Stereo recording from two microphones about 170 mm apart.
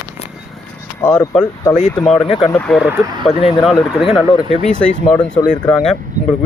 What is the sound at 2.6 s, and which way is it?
Speech, 5° left (ahead or behind).